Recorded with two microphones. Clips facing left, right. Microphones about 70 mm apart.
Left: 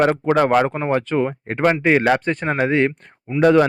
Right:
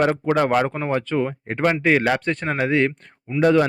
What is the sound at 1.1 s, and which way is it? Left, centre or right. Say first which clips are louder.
Speech: left 2 dB; left.